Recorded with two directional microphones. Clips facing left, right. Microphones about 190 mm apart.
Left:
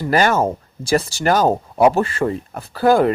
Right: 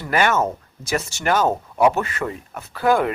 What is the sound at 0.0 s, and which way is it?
Speech, 35° left (ahead or behind).